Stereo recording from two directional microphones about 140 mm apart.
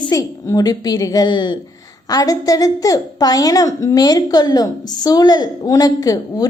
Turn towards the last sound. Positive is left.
turn(degrees=25)  # may be behind; listen again after turning